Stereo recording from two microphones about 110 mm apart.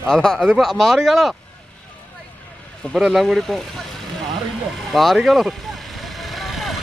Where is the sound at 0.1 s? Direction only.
5° left (ahead or behind).